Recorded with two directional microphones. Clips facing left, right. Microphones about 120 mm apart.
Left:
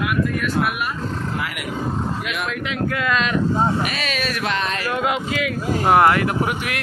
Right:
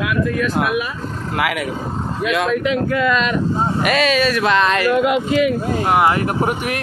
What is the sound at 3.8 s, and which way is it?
Speech, 90° right.